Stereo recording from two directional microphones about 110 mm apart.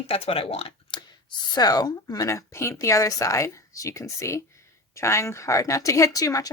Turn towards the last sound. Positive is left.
turn(degrees=30)  # may be behind; listen again after turning